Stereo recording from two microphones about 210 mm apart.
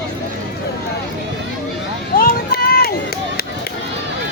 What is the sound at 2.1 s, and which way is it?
Run, 45° left (ahead or behind).